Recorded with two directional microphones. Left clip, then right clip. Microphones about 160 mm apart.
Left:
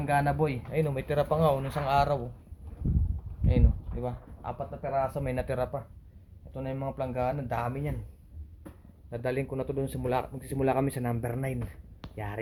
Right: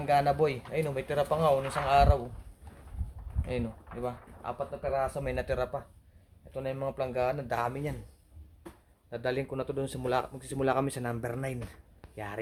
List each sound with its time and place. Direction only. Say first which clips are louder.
0.0 s speech: right 2 dB; 10° right (ahead or behind)
0.7 s speech: left 1 dB; centre (ahead or behind)
4.0 s speech: even; 5° right (ahead or behind)
9.0 s speech: left 1 dB; 10° right (ahead or behind)